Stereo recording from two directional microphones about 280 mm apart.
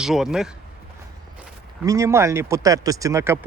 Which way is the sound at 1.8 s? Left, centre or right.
Centre.